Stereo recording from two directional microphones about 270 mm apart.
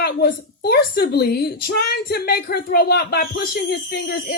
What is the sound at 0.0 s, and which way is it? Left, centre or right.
A woman's voice, left.